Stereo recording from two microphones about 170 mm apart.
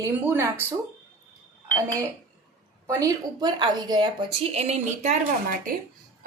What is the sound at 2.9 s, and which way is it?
Speech, 20° right (ahead or behind).